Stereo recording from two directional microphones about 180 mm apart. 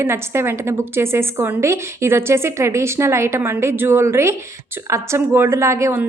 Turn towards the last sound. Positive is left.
turn(degrees=-15)  # may be behind; listen again after turning